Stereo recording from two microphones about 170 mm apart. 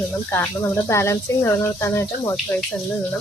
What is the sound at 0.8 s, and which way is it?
Speech, 15° left (ahead or behind).